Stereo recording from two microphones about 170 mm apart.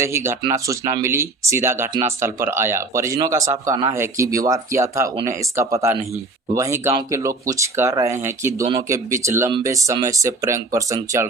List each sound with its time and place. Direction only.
0.0 s speech: 15° right (ahead or behind)